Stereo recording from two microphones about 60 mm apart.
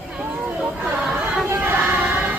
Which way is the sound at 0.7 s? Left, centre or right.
Right.